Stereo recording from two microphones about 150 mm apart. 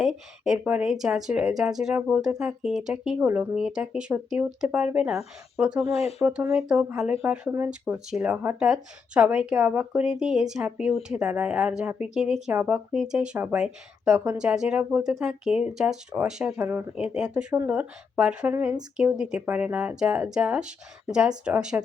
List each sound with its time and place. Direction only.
0.0 s speech: 5° right (ahead or behind)